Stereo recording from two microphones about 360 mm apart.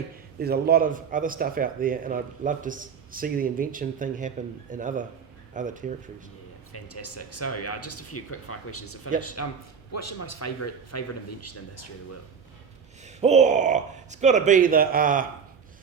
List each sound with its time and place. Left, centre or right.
0.3 s speech: right
6.7 s a man's voice: left
13.1 s speech: centre